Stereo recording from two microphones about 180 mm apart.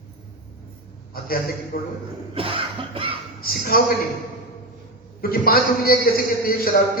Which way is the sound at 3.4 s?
55° left (ahead or behind).